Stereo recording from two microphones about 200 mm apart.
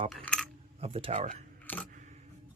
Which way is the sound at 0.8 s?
30° right (ahead or behind).